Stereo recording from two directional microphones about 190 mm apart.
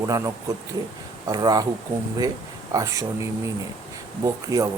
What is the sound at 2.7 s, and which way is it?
Speech, 15° right (ahead or behind).